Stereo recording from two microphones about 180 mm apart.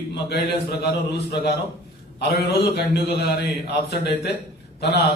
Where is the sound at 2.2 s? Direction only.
65° left (ahead or behind).